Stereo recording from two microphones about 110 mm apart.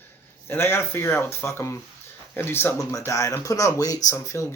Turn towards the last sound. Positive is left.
turn(degrees=30)  # may be behind; listen again after turning